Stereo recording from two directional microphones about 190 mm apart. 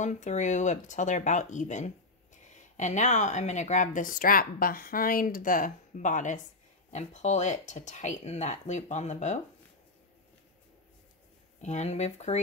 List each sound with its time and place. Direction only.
0.0 s speech: 40° left (ahead or behind)
11.6 s speech: 35° left (ahead or behind)